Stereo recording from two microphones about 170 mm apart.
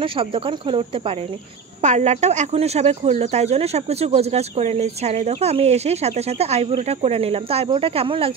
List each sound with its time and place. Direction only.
0.0 s speech: 30° right (ahead or behind)
1.8 s speech: 45° right (ahead or behind)